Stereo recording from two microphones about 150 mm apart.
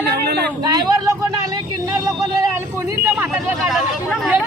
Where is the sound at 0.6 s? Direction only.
25° right (ahead or behind).